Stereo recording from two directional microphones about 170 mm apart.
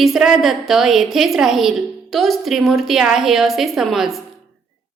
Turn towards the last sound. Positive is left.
turn(degrees=0)  # may be behind; listen again after turning